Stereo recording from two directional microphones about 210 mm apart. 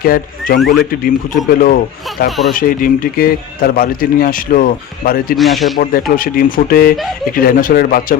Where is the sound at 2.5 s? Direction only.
45° left (ahead or behind).